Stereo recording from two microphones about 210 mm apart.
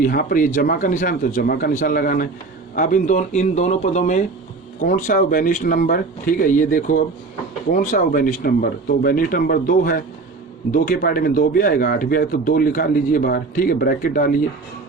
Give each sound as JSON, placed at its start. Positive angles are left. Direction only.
{"t": 0.0, "sound": "speech", "side_deg": 40}